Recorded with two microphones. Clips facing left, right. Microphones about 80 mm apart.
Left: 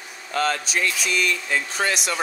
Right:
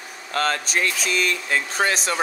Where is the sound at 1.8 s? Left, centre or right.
Right.